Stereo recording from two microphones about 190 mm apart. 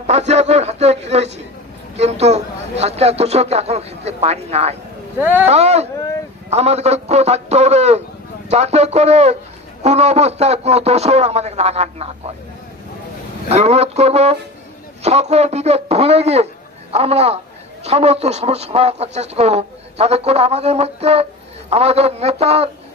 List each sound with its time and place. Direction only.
0.0 s a sound: 35° right (ahead or behind)
5.2 s speech: 10° right (ahead or behind)
5.5 s a man's voice: 35° right (ahead or behind)
13.5 s a man's voice: 35° right (ahead or behind)